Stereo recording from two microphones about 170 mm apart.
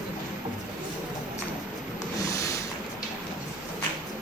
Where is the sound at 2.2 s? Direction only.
20° left (ahead or behind).